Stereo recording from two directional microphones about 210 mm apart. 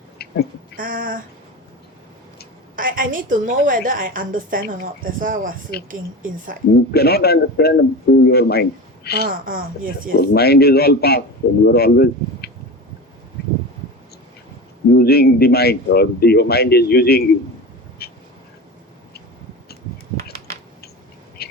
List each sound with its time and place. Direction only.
0.2 s a sound: 50° left (ahead or behind)
0.8 s a woman's voice: 40° right (ahead or behind)
2.7 s a woman's voice: 40° right (ahead or behind)
6.9 s speech: 50° left (ahead or behind)
9.2 s a woman's voice: 40° right (ahead or behind)
10.2 s speech: 50° left (ahead or behind)
14.9 s speech: 50° left (ahead or behind)
18.0 s a sound: 50° left (ahead or behind)
21.4 s a sound: 50° left (ahead or behind)